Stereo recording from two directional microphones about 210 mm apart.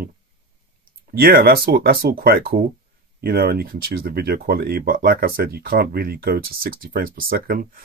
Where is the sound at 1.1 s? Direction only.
45° right (ahead or behind).